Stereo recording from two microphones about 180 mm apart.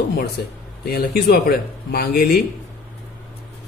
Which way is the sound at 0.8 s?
60° left (ahead or behind).